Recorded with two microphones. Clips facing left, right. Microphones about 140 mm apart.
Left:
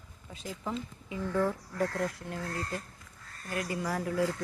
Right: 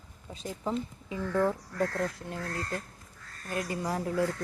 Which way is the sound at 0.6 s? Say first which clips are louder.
Right 5 dB; 25° right (ahead or behind).